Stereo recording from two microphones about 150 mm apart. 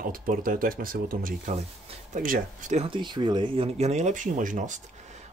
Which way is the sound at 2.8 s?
30° right (ahead or behind).